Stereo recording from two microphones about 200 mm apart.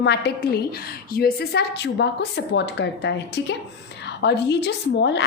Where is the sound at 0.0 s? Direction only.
60° left (ahead or behind).